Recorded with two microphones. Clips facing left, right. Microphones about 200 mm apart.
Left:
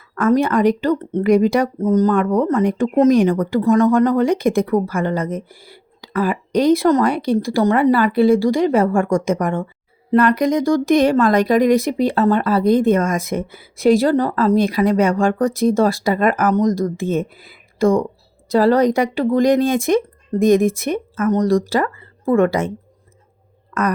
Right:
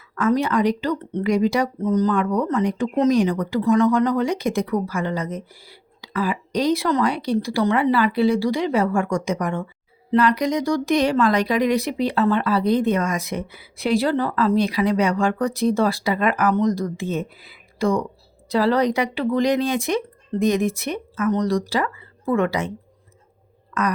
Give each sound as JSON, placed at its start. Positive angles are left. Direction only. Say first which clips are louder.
{"t": 0.2, "sound": "speech", "louder": "left 4 dB", "side_deg": 50}
{"t": 23.7, "sound": "speech", "louder": "left 3 dB", "side_deg": 55}